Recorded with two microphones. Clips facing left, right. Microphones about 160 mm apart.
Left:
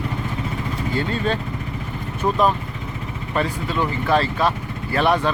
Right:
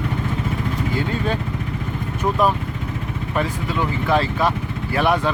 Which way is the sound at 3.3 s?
10° right (ahead or behind).